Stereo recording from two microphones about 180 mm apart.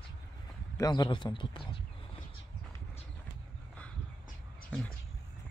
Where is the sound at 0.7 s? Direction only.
20° left (ahead or behind).